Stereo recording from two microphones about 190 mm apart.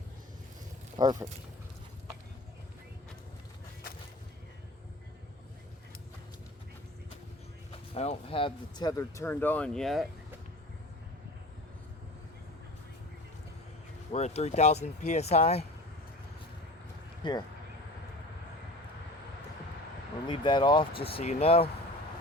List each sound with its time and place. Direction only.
0.9 s speech: 20° right (ahead or behind)
7.9 s speech: 30° left (ahead or behind); by 10.1 s centre (ahead or behind)
14.1 s speech: 35° left (ahead or behind)
17.2 s speech: 25° left (ahead or behind)
20.2 s speech: 25° left (ahead or behind)